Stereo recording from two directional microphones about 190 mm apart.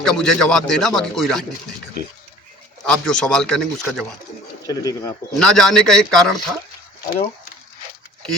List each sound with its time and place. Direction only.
0.0 s speech: centre (ahead or behind)
2.8 s speech: 5° left (ahead or behind)
4.7 s speech: 20° left (ahead or behind)
5.4 s speech: 5° left (ahead or behind)